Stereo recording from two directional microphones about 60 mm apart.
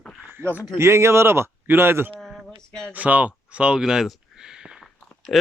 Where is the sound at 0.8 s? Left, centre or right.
Right.